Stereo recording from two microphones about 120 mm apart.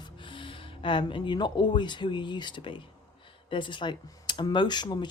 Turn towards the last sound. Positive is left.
turn(degrees=35)  # may be behind; listen again after turning